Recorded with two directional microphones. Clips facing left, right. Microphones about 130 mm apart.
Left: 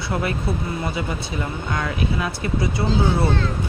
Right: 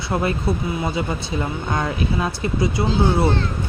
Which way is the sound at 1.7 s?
30° right (ahead or behind).